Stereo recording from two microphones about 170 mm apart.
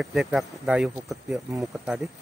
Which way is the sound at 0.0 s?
Centre (ahead or behind).